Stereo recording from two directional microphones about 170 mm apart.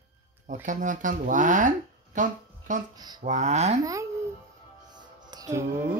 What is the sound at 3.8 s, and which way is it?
Speech, 20° right (ahead or behind).